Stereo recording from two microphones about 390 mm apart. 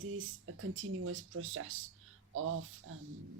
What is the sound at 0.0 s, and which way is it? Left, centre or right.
Speech, right.